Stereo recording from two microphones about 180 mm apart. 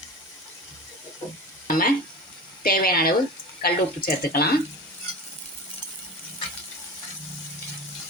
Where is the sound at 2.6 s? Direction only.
55° left (ahead or behind).